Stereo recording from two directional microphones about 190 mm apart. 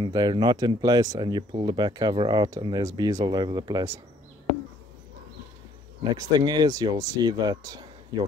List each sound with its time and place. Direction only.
0.0 s speech: 25° right (ahead or behind)
6.1 s speech: 20° right (ahead or behind)